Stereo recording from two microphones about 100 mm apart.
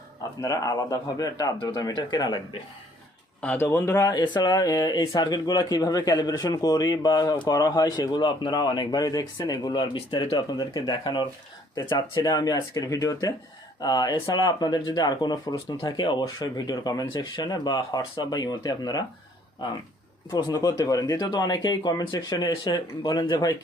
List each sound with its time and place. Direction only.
0.4 s speech: 35° left (ahead or behind)
3.4 s speech: 10° left (ahead or behind)
3.7 s speech: 30° left (ahead or behind)
4.4 s a man's voice: 40° left (ahead or behind)
20.3 s speech: 35° left (ahead or behind)